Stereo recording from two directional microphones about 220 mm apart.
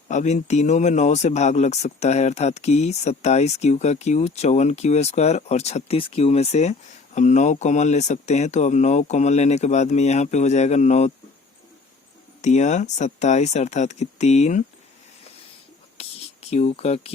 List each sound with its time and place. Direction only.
0.1 s speech: 30° left (ahead or behind)
12.4 s speech: 30° left (ahead or behind)
16.0 s a sound: 25° left (ahead or behind)
16.5 s speech: 30° left (ahead or behind)